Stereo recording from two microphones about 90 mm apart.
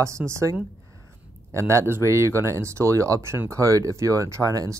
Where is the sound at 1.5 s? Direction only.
30° right (ahead or behind).